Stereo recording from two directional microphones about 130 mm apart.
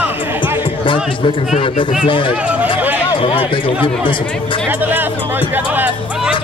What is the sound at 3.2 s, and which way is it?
Speech, 40° left (ahead or behind).